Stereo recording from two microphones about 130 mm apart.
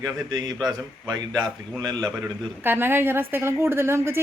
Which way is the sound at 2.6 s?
15° right (ahead or behind).